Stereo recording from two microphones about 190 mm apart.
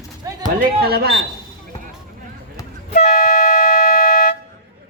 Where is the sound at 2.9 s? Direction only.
40° left (ahead or behind).